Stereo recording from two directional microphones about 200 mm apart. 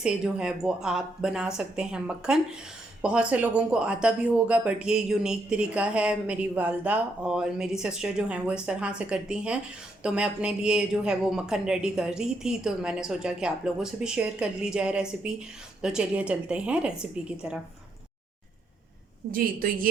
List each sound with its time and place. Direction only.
0.0 s speech: 5° right (ahead or behind)
19.3 s a woman's voice: 45° right (ahead or behind)